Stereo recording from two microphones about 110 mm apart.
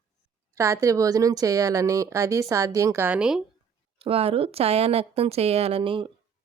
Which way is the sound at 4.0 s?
60° right (ahead or behind).